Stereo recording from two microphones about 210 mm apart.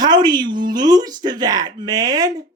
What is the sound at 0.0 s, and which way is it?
Speech, 20° right (ahead or behind).